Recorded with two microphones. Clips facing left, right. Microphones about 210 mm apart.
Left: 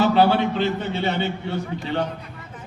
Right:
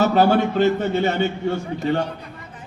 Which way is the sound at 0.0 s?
45° right (ahead or behind).